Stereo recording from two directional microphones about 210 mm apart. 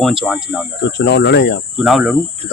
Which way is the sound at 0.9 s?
55° left (ahead or behind).